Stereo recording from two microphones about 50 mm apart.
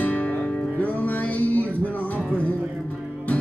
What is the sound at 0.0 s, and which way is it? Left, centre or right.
Music, left.